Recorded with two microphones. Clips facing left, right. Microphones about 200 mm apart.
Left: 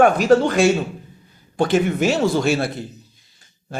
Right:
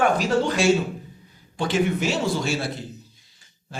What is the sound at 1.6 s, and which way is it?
Speech, 55° left (ahead or behind).